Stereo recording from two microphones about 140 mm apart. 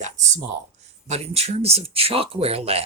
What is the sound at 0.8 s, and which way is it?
Speech, 50° right (ahead or behind).